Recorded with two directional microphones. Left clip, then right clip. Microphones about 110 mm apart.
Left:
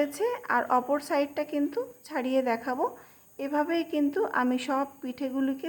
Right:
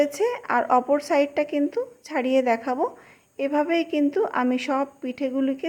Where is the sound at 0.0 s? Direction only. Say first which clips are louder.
Right 6 dB; 30° right (ahead or behind).